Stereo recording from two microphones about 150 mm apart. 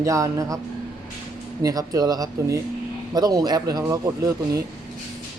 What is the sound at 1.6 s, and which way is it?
Speech, 25° right (ahead or behind).